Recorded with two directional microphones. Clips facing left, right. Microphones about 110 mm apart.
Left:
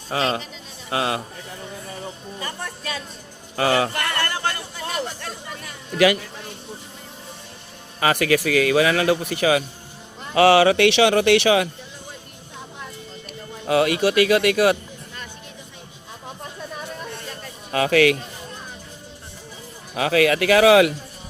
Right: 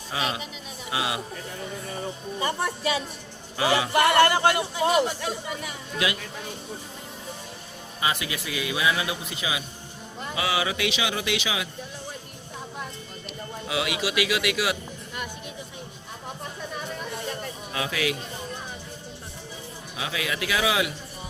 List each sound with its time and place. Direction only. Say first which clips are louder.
0.1 s speech: left 6 dB; 35° left (ahead or behind)
2.4 s speech: right 6 dB; 15° right (ahead or behind)
3.6 s speech: left 4 dB; 45° left (ahead or behind)
3.9 s speech: right 7 dB; 15° right (ahead or behind)
8.0 s a man's voice: left 10 dB; 65° left (ahead or behind)
13.7 s speech: left 10 dB; 50° left (ahead or behind)
17.7 s a man's voice: left 12 dB; 60° left (ahead or behind)
20.0 s a man's voice: left 12 dB; 60° left (ahead or behind)